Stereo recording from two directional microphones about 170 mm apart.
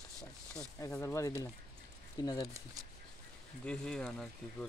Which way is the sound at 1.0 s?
15° left (ahead or behind).